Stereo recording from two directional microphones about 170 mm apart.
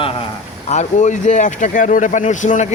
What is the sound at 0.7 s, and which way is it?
Speech, 45° left (ahead or behind).